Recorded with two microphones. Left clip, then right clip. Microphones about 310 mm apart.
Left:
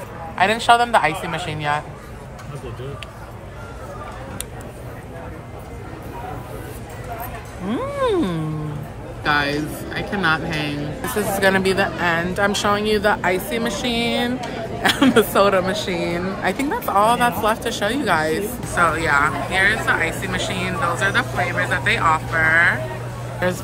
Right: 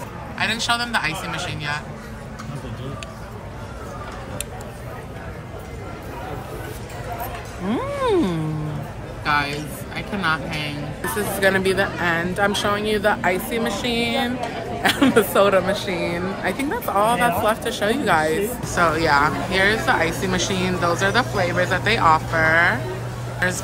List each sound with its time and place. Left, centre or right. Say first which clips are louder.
0.4 s a man's voice: left 7 dB; left
7.7 s speech: even; centre
9.2 s speech: left 2 dB; centre